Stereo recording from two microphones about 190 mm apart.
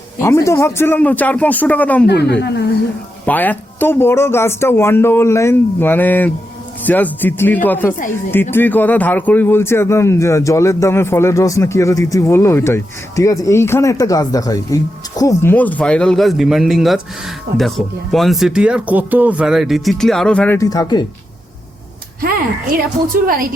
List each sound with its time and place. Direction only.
0.2 s speech: 15° left (ahead or behind)
2.0 s speech: 60° left (ahead or behind)
3.2 s speech: 10° left (ahead or behind)
20.6 s speech: 20° left (ahead or behind)
23.2 s a woman's voice: 50° right (ahead or behind)